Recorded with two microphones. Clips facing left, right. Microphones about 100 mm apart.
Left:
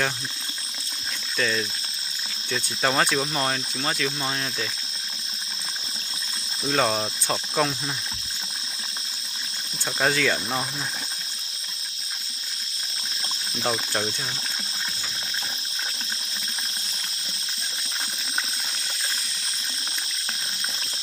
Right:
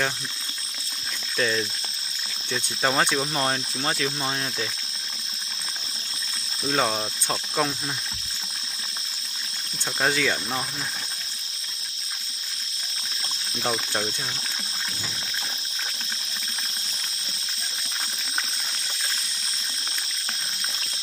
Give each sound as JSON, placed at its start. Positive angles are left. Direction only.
{"t": 1.4, "sound": "speech", "side_deg": -15}
{"t": 2.5, "sound": "cricket", "side_deg": 0}
{"t": 3.2, "sound": "speech", "side_deg": -10}
{"t": 6.7, "sound": "cricket", "side_deg": 0}
{"t": 10.0, "sound": "cricket", "side_deg": -5}
{"t": 13.6, "sound": "cricket", "side_deg": 5}